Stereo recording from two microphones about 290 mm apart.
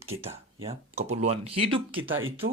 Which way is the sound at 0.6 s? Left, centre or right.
Right.